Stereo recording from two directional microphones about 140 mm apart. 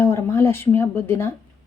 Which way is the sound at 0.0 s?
20° left (ahead or behind).